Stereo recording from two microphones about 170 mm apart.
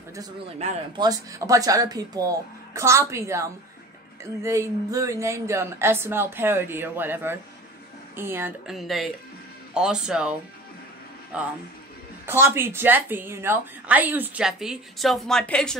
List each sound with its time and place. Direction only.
0.9 s a woman's voice: 20° right (ahead or behind)
8.6 s speech: centre (ahead or behind)
11.3 s a woman's voice: 5° right (ahead or behind)